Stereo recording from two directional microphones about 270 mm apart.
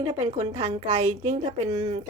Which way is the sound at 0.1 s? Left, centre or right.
Right.